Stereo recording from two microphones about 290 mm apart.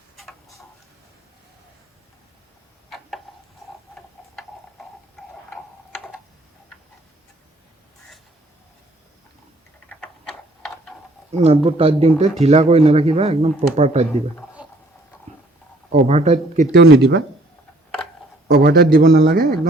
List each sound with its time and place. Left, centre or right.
0.2 s tick-tock: centre
9.9 s a sound: centre
11.4 s speech: centre
15.9 s speech: right
16.7 s a man's voice: right
18.4 s a man's voice: right